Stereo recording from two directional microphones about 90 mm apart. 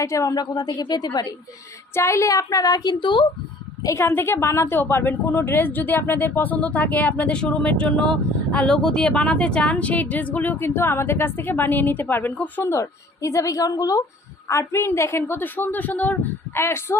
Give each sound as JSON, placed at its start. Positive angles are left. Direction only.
{"t": 0.0, "sound": "a woman's voice", "side_deg": 35}
{"t": 2.0, "sound": "a woman's voice", "side_deg": 30}
{"t": 3.0, "sound": "speech", "side_deg": 60}
{"t": 3.8, "sound": "a woman's voice", "side_deg": 30}
{"t": 12.7, "sound": "a woman's voice", "side_deg": 35}